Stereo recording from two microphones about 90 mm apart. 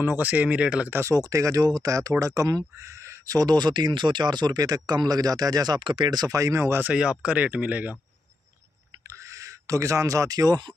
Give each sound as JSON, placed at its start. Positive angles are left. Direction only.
{"t": 0.0, "sound": "speech", "side_deg": -20}
{"t": 0.9, "sound": "speech", "side_deg": -35}
{"t": 3.3, "sound": "speech", "side_deg": -50}
{"t": 5.8, "sound": "speech", "side_deg": -65}
{"t": 6.8, "sound": "speech", "side_deg": -10}
{"t": 9.0, "sound": "a sound", "side_deg": -35}